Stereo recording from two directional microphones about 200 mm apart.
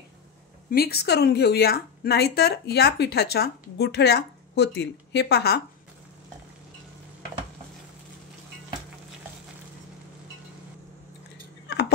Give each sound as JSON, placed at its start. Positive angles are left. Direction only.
{"t": 0.7, "sound": "a woman's voice", "side_deg": 50}